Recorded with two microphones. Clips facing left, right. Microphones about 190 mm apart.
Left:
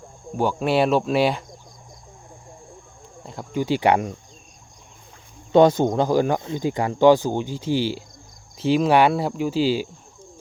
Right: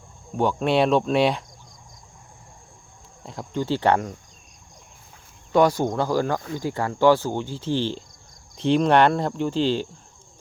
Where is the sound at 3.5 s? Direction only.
15° left (ahead or behind).